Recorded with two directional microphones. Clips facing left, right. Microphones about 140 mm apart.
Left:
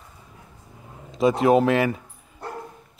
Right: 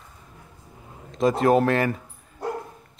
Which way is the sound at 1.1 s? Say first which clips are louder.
Left 1 dB; centre (ahead or behind).